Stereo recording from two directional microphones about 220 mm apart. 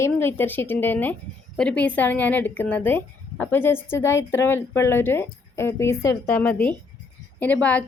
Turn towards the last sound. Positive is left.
turn(degrees=5)  # may be behind; listen again after turning